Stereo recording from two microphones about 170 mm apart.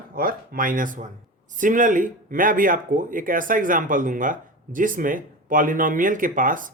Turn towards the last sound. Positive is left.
turn(degrees=-50)  # may be behind; listen again after turning